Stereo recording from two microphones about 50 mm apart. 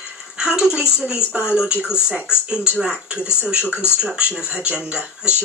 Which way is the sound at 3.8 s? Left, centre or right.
Left.